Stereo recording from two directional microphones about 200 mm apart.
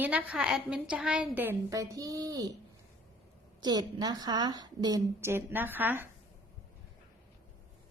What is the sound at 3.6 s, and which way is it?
A woman's voice, 20° right (ahead or behind).